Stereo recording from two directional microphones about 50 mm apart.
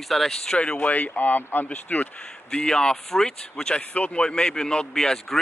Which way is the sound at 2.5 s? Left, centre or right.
Centre.